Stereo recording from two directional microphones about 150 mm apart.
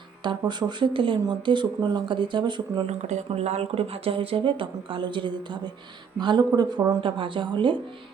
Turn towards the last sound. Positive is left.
turn(degrees=-30)  # may be behind; listen again after turning